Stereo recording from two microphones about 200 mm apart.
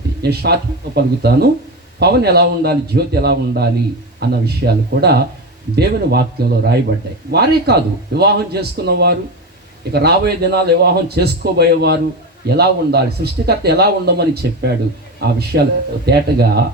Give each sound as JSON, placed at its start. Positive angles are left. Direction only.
{"t": 0.2, "sound": "speech", "side_deg": -55}